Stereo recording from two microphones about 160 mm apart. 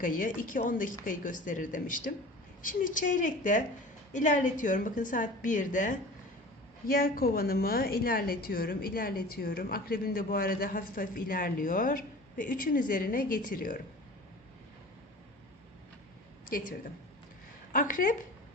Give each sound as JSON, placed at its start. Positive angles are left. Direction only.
{"t": 0.0, "sound": "a woman's voice", "side_deg": 55}
{"t": 6.8, "sound": "a woman's voice", "side_deg": 65}
{"t": 16.5, "sound": "a woman's voice", "side_deg": 60}